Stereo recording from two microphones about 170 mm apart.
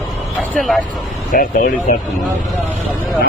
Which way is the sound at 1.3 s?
55° left (ahead or behind).